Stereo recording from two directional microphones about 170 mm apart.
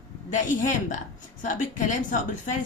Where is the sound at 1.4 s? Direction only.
50° left (ahead or behind).